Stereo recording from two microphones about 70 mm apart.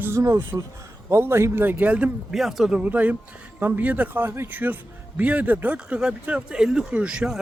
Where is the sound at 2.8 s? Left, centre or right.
Right.